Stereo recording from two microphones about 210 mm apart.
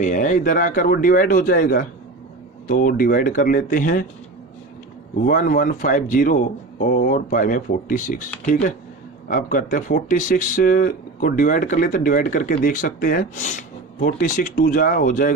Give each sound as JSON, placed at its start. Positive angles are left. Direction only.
{"t": 0.0, "sound": "speech", "side_deg": 35}
{"t": 5.2, "sound": "speech", "side_deg": 40}
{"t": 9.3, "sound": "speech", "side_deg": 40}